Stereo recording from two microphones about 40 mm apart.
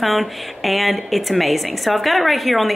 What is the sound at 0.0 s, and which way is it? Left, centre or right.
A woman's voice, centre.